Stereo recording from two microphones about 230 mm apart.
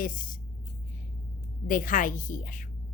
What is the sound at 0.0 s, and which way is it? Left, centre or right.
Speech, left.